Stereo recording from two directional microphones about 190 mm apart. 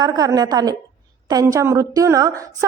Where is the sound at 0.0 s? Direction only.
20° right (ahead or behind).